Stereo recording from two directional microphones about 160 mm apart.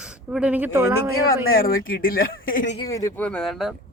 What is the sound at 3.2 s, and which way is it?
Speech, 5° left (ahead or behind).